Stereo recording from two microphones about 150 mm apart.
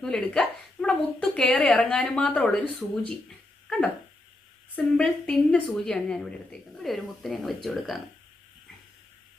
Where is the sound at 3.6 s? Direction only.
5° left (ahead or behind).